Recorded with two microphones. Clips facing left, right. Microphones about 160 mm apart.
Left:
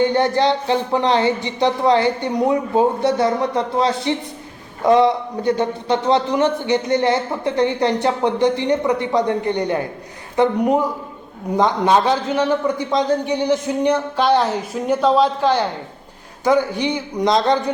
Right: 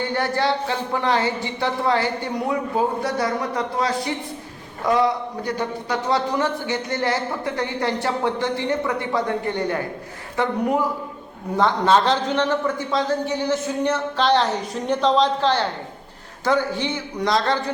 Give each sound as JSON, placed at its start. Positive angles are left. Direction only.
{"t": 0.0, "sound": "a man's voice", "side_deg": 20}